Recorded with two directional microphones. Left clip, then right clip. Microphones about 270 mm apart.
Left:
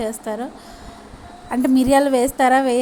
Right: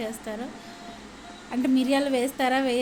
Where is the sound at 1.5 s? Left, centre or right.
Centre.